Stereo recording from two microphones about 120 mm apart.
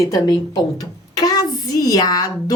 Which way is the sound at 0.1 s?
30° left (ahead or behind).